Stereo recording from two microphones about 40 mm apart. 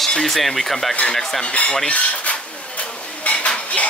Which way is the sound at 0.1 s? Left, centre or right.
Centre.